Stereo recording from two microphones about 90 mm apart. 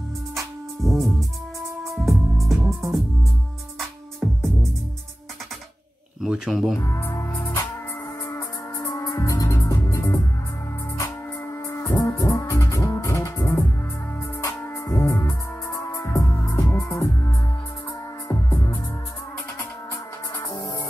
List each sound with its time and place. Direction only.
0.4 s music: centre (ahead or behind)
6.2 s speech: 5° right (ahead or behind)
6.8 s music: 30° left (ahead or behind)
8.8 s music: 40° left (ahead or behind)
11.9 s music: 40° left (ahead or behind)